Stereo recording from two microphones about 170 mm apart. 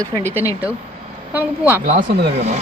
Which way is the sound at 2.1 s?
70° right (ahead or behind).